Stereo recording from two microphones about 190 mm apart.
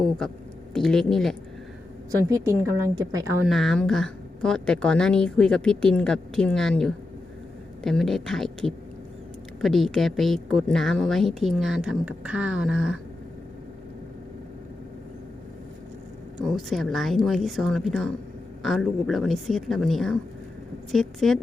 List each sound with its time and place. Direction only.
0.7 s a woman's voice: centre (ahead or behind)
2.3 s a woman's voice: 15° right (ahead or behind)
3.4 s a woman's voice: centre (ahead or behind)
16.4 s a woman's voice: centre (ahead or behind)